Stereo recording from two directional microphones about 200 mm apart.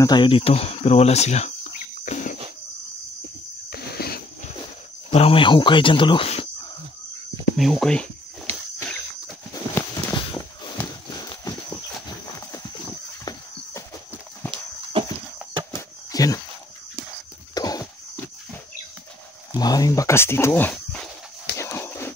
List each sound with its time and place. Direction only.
0.0 s speech: 20° left (ahead or behind)
2.0 s cricket: 35° left (ahead or behind)
3.7 s a sound: 50° left (ahead or behind)
5.1 s speech: 30° left (ahead or behind)
7.5 s speech: centre (ahead or behind)
9.5 s walk: 20° left (ahead or behind)
10.8 s horse: 20° left (ahead or behind)
13.2 s horse: 20° left (ahead or behind)
14.5 s horse: 25° right (ahead or behind)
16.1 s walk: 20° left (ahead or behind)
17.6 s a sound: 20° left (ahead or behind)
19.5 s a sound: 20° left (ahead or behind)